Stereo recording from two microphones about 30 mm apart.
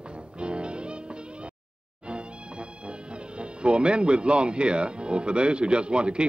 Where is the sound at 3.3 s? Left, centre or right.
Right.